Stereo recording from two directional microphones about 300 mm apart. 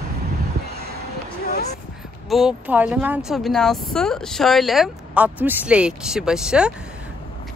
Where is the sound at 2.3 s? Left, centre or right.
Centre.